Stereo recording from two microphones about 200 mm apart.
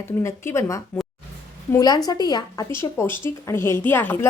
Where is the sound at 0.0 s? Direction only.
15° left (ahead or behind).